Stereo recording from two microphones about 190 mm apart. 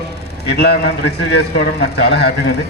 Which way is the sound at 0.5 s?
60° left (ahead or behind).